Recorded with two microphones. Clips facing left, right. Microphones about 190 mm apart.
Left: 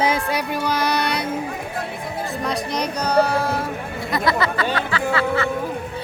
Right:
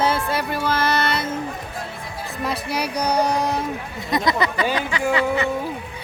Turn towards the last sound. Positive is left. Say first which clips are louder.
# right 1 dB
turn(degrees=-15)  # may be behind; listen again after turning